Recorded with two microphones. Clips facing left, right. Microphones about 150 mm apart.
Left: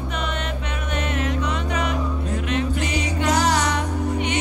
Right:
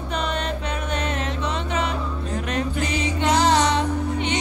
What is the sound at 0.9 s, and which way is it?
Music, 30° right (ahead or behind).